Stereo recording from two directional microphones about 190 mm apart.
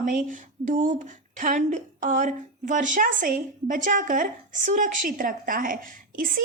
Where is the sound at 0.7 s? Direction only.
45° right (ahead or behind).